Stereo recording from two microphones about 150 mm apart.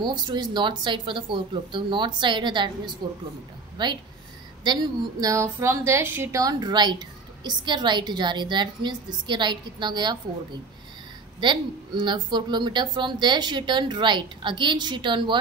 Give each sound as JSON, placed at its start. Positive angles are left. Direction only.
{"t": 0.0, "sound": "a woman's voice", "side_deg": -30}